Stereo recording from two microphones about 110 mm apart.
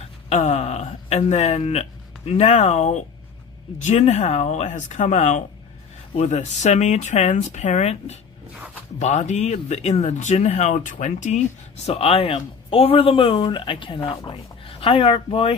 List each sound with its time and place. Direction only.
0.3 s speech: 85° left
11.9 s speech: 65° left (ahead or behind)